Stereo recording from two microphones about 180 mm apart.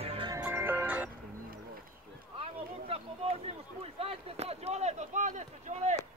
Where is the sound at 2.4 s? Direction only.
30° right (ahead or behind).